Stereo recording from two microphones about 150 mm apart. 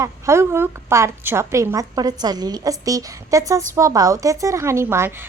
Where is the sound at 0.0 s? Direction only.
20° right (ahead or behind).